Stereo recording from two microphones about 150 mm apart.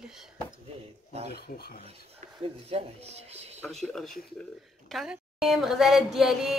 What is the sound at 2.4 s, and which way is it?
Speech, 40° right (ahead or behind).